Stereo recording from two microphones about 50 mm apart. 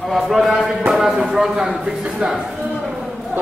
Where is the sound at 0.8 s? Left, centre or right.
Centre.